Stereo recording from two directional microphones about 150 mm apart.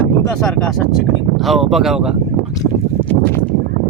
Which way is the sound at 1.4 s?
Centre (ahead or behind).